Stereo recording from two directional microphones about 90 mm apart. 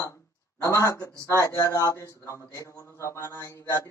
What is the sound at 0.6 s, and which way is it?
Speech, 35° left (ahead or behind).